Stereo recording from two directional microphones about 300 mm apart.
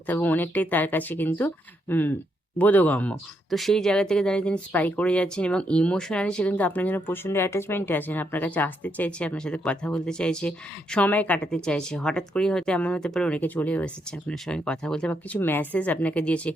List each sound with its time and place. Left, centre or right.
0.1 s speech: centre